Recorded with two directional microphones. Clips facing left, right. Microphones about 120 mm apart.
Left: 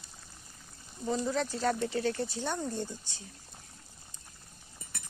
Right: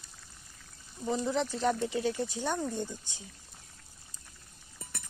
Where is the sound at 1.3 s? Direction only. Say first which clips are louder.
Right 1 dB; 20° right (ahead or behind).